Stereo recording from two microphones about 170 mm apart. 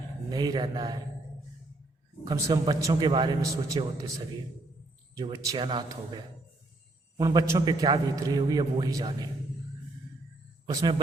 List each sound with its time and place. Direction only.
0.3 s a man's voice: 25° right (ahead or behind)
2.2 s a man's voice: 25° right (ahead or behind)
5.1 s a man's voice: 25° right (ahead or behind)
7.2 s a man's voice: 20° right (ahead or behind)
10.7 s a man's voice: 25° right (ahead or behind)